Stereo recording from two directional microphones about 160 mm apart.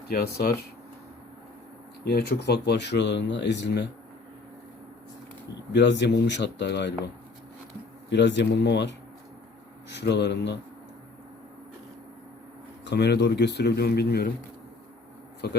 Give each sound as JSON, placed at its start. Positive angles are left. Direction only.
{"t": 0.1, "sound": "speech", "side_deg": 70}
{"t": 2.0, "sound": "speech", "side_deg": 80}
{"t": 5.7, "sound": "speech", "side_deg": 90}
{"t": 8.1, "sound": "speech", "side_deg": 90}
{"t": 12.8, "sound": "speech", "side_deg": 90}
{"t": 15.4, "sound": "speech", "side_deg": 85}